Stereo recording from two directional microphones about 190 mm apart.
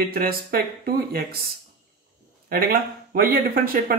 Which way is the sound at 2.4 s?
50° right (ahead or behind).